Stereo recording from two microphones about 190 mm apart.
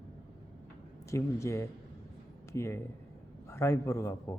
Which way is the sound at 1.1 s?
15° left (ahead or behind).